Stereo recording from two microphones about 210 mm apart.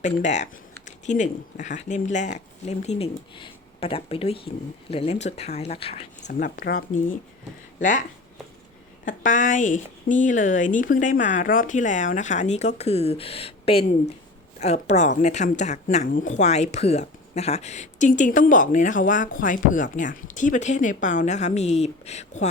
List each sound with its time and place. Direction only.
0.0 s speech: 35° left (ahead or behind)
6.4 s speech: 45° left (ahead or behind)
9.0 s speech: 40° left (ahead or behind)